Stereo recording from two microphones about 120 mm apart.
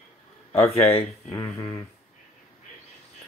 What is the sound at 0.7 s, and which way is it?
Speech, 55° left (ahead or behind).